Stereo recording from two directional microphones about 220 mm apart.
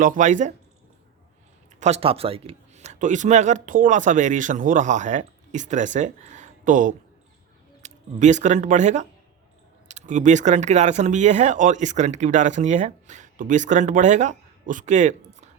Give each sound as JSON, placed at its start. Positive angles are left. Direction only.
{"t": 0.0, "sound": "speech", "side_deg": -35}
{"t": 1.8, "sound": "speech", "side_deg": -30}